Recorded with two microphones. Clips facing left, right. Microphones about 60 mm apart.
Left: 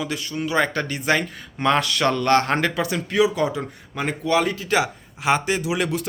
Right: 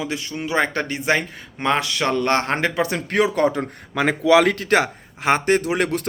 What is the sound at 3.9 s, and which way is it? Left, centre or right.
Speech, right.